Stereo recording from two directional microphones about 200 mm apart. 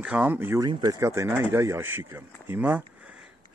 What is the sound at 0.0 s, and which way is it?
Speech, 10° right (ahead or behind).